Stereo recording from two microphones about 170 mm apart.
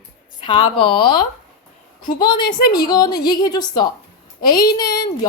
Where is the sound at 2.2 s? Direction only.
25° left (ahead or behind).